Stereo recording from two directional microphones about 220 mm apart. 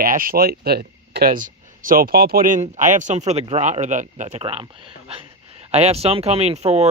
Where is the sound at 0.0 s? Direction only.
40° right (ahead or behind).